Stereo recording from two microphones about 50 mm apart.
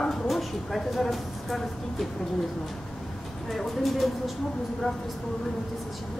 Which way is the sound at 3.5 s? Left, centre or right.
Centre.